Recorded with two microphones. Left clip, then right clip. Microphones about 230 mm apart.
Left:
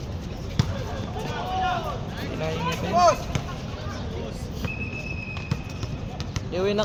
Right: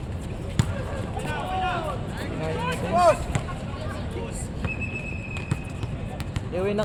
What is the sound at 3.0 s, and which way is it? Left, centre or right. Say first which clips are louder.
Speech: even; centre.